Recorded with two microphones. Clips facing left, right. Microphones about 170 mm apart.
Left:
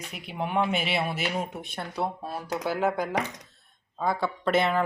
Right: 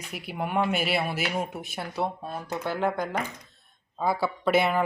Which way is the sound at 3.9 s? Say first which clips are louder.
Right 1 dB; 5° right (ahead or behind).